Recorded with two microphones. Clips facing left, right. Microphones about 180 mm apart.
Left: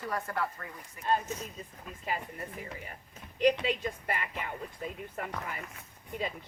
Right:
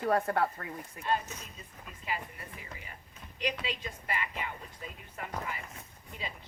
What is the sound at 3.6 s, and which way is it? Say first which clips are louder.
Speech: left 6 dB; 50° left (ahead or behind).